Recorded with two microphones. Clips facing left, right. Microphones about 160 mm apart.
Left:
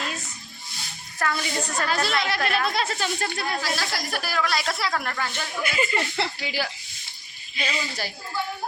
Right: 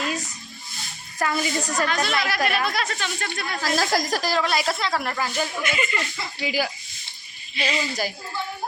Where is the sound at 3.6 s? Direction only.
45° right (ahead or behind).